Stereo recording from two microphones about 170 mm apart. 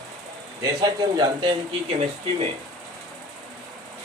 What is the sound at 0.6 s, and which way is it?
Speech, 20° right (ahead or behind).